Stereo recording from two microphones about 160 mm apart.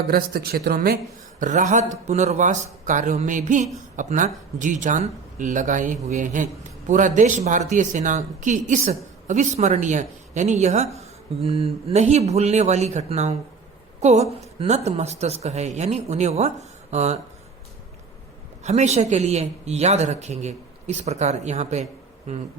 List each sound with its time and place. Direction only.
0.1 s speech: 70° right (ahead or behind)
1.4 s speech: 50° right (ahead or behind)
18.6 s speech: 45° right (ahead or behind)